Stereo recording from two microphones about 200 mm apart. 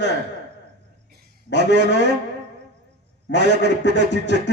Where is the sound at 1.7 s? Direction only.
60° left (ahead or behind).